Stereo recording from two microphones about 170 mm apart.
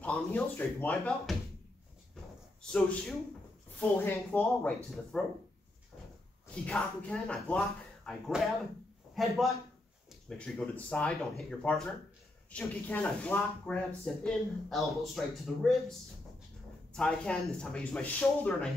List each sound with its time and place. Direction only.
0.0 s speech: 5° left (ahead or behind)
2.6 s speech: 5° left (ahead or behind)
6.5 s a man's voice: 5° left (ahead or behind)
16.9 s speech: 5° left (ahead or behind)